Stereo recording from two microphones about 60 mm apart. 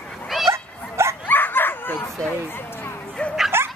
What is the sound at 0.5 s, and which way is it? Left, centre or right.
Dog, right.